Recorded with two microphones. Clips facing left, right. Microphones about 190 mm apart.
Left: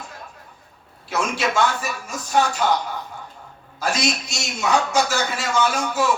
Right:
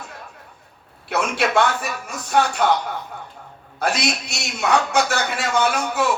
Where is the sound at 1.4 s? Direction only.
60° right (ahead or behind).